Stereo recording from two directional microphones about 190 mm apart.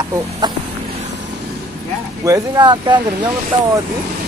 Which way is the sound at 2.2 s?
15° right (ahead or behind).